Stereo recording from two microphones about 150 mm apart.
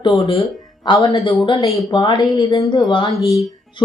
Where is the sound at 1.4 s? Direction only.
40° left (ahead or behind).